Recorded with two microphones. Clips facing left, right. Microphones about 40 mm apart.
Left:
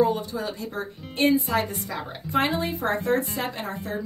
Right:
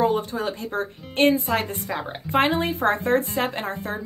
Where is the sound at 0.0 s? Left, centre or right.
Right.